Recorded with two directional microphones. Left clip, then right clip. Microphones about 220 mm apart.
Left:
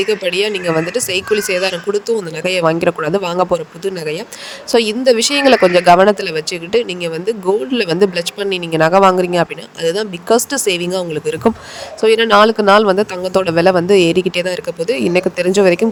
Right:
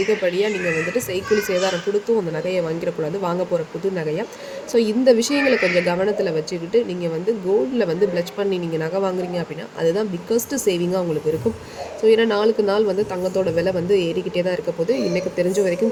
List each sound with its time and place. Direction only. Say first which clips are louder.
0.1 s speech: left 4 dB; 45° left (ahead or behind)